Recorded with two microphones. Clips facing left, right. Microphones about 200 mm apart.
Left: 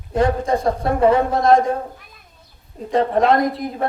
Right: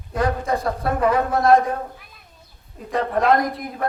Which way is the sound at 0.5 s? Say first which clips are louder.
Left 4 dB; 30° left (ahead or behind).